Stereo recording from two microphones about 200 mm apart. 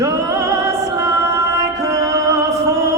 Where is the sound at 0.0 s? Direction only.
15° right (ahead or behind).